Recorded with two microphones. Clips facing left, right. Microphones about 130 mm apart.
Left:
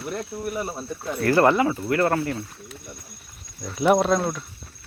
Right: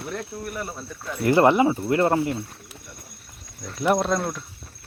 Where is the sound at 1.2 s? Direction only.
20° right (ahead or behind).